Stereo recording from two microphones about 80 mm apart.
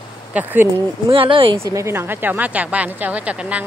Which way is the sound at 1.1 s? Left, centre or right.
Right.